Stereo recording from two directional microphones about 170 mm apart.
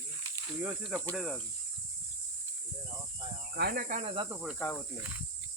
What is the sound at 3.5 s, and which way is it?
Speech, 65° right (ahead or behind).